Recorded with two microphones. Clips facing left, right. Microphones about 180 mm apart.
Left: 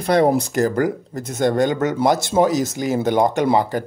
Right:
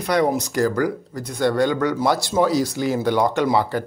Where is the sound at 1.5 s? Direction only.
20° left (ahead or behind).